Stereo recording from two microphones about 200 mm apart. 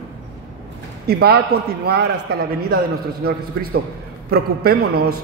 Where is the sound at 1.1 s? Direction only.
50° right (ahead or behind).